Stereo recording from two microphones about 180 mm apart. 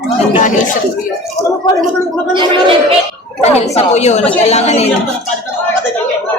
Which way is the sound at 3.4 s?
35° left (ahead or behind).